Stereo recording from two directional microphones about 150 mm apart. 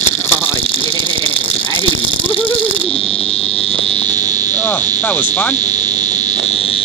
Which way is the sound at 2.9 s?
40° left (ahead or behind).